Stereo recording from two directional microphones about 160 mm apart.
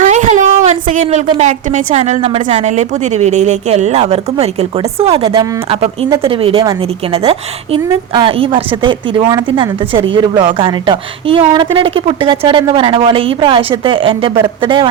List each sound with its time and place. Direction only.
0.0 s a sound: 50° right (ahead or behind)
1.0 s a woman's voice: 45° right (ahead or behind)
5.2 s speech: 25° right (ahead or behind)
5.6 s a woman's voice: 40° right (ahead or behind)